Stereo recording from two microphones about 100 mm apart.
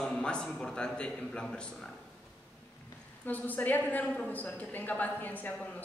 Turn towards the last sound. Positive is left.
turn(degrees=15)  # may be behind; listen again after turning